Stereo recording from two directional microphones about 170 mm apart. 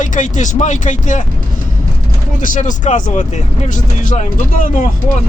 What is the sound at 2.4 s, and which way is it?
Speech, 50° left (ahead or behind).